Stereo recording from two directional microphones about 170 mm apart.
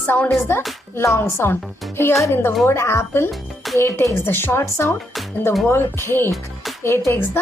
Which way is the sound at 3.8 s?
15° left (ahead or behind).